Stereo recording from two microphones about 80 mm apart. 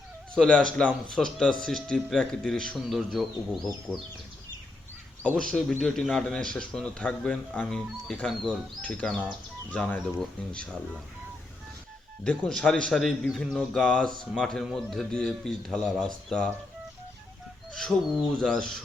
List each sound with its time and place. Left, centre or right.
0.3 s speech: centre
3.9 s speech: right
5.5 s speech: centre
12.2 s speech: centre
17.7 s speech: centre